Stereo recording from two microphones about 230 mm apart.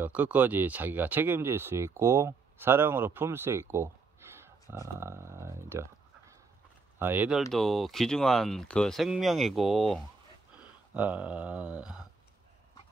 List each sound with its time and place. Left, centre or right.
0.0 s speech: centre
7.0 s speech: centre